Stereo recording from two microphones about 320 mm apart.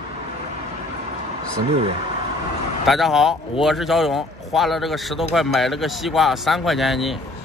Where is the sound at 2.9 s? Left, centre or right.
Centre.